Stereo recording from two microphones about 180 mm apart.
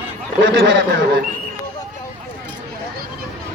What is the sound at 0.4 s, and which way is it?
Speech, 75° right (ahead or behind).